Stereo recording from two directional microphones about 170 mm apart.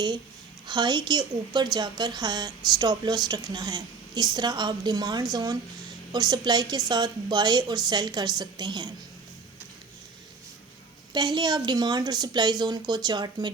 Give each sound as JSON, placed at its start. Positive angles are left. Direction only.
{"t": 0.7, "sound": "a woman's voice", "side_deg": -25}
{"t": 11.1, "sound": "a woman's voice", "side_deg": -25}